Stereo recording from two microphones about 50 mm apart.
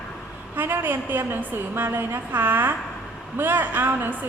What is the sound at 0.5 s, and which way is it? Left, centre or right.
A woman's voice, right.